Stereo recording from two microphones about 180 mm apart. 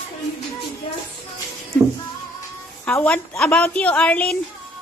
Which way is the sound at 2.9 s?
10° left (ahead or behind).